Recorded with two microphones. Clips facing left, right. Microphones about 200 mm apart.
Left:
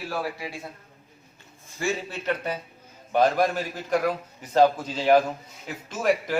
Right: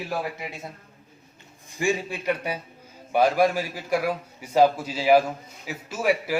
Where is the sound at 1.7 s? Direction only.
15° right (ahead or behind).